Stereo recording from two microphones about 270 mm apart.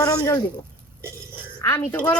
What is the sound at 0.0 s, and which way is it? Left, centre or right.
Speech, centre.